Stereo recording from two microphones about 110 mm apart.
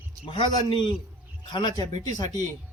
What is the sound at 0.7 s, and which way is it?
Speech, 50° left (ahead or behind).